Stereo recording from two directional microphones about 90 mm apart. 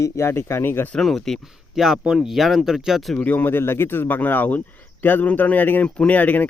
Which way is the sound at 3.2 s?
20° left (ahead or behind).